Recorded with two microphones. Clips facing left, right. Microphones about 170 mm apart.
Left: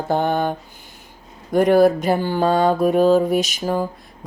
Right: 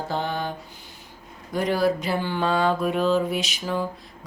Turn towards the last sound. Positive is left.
turn(degrees=45)  # may be behind; listen again after turning